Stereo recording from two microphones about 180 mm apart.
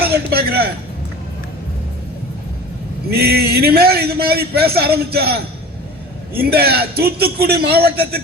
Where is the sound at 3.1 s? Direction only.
60° right (ahead or behind).